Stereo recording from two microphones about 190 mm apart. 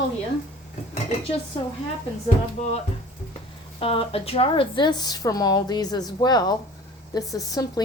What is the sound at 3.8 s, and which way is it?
Speech, 30° left (ahead or behind).